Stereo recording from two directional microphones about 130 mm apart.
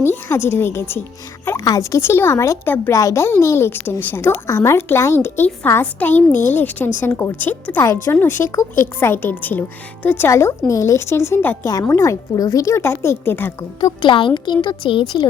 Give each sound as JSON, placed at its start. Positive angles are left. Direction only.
{"t": 0.0, "sound": "speech", "side_deg": 20}
{"t": 14.0, "sound": "speech", "side_deg": 40}